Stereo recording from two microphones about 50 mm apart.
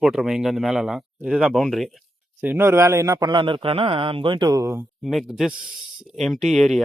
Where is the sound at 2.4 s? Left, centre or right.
Right.